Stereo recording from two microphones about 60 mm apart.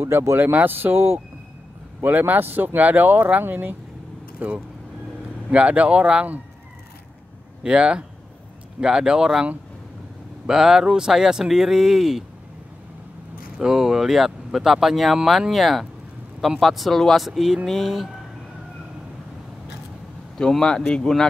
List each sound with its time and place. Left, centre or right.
0.0 s speech: right
0.4 s speech: right
7.6 s speech: centre
13.6 s speech: centre
20.3 s speech: centre